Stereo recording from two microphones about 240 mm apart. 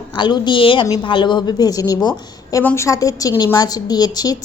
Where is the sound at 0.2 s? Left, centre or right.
Centre.